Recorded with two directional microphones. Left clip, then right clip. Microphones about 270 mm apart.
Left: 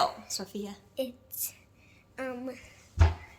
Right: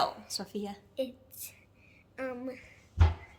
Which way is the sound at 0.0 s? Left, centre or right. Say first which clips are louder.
Left 2 dB; centre.